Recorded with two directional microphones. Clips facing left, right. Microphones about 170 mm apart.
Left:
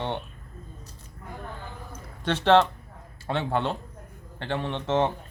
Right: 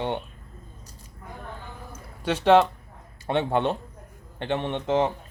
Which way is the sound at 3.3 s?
20° right (ahead or behind).